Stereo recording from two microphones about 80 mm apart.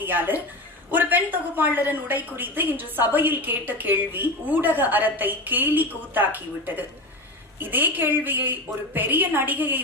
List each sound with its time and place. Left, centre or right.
0.0 s a woman's voice: right